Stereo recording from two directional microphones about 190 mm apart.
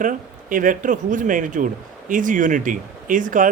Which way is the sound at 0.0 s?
45° right (ahead or behind).